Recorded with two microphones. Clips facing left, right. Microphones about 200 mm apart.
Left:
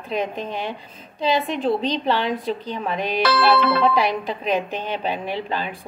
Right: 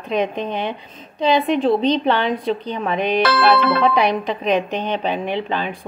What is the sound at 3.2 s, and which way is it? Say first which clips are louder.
Music: even; 50° right (ahead or behind).